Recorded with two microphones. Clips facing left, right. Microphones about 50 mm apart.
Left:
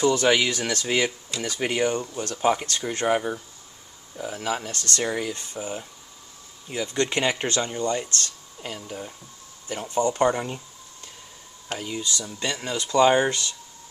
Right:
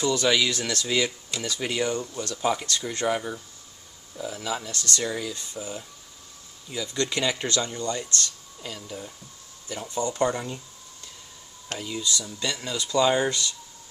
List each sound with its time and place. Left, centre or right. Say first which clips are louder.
0.0 s speech: left 3 dB; left
4.2 s speech: left 2 dB; left
8.6 s speech: left 2 dB; left
11.8 s speech: right 1 dB; left